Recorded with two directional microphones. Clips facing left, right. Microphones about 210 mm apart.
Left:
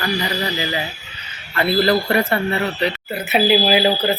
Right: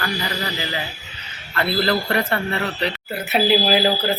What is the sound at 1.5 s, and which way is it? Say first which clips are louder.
A man's voice: left 4 dB; 15° left (ahead or behind).